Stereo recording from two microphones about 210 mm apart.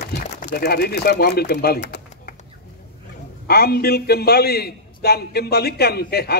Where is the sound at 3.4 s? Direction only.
50° left (ahead or behind).